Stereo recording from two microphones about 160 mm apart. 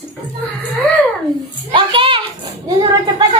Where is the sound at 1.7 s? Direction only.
35° right (ahead or behind).